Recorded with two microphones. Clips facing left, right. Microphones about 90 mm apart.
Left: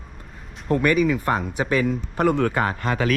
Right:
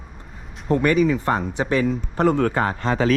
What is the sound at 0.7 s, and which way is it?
Speech, 30° right (ahead or behind).